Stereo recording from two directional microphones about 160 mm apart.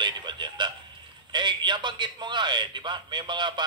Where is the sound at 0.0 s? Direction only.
30° right (ahead or behind).